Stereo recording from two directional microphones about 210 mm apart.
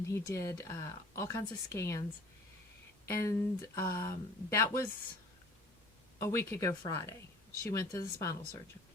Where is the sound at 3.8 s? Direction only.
45° left (ahead or behind).